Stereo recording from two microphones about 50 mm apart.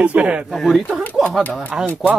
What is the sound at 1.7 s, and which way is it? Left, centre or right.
Speech, centre.